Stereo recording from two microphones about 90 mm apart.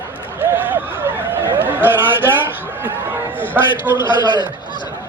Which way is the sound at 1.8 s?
25° right (ahead or behind).